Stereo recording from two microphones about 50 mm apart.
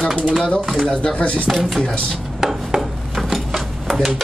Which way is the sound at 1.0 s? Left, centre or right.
Left.